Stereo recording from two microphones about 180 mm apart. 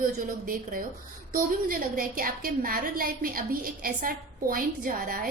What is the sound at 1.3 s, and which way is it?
A woman's voice, 50° right (ahead or behind).